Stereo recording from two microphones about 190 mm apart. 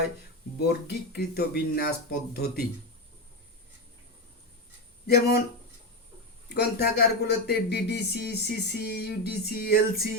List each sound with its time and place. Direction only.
0.6 s speech: 60° left (ahead or behind)
5.0 s speech: 55° left (ahead or behind)
6.5 s speech: 60° left (ahead or behind)